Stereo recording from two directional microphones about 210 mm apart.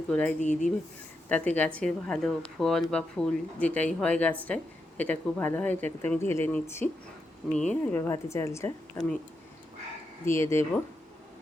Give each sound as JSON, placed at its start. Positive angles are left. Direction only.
{"t": 0.1, "sound": "speech", "side_deg": 5}
{"t": 0.3, "sound": "speech", "side_deg": 35}
{"t": 1.3, "sound": "speech", "side_deg": 5}
{"t": 10.2, "sound": "speech", "side_deg": 15}